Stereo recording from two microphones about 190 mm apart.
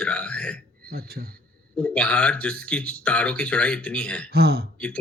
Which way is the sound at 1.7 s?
5° left (ahead or behind).